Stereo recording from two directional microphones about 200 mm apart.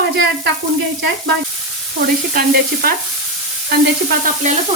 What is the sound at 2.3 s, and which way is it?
Stir, 45° right (ahead or behind).